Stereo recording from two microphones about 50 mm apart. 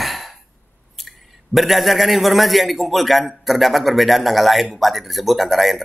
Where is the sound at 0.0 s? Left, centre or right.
Centre.